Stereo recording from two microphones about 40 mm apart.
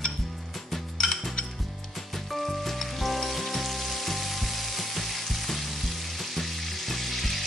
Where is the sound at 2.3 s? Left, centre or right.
Centre.